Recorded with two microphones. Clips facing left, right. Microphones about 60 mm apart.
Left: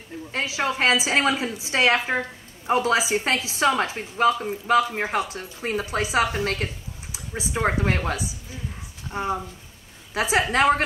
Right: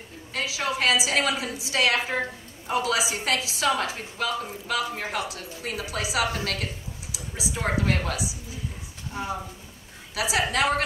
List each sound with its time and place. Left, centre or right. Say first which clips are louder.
0.3 s a woman's voice: left 3 dB; left